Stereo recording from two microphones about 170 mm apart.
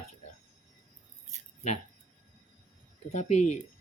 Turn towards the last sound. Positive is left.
turn(degrees=40)  # may be behind; listen again after turning